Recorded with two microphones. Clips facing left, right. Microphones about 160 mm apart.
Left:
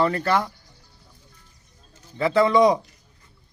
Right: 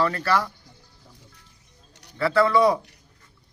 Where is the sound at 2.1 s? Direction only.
15° left (ahead or behind).